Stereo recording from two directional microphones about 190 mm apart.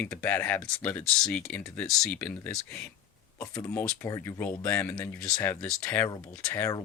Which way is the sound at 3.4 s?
15° left (ahead or behind).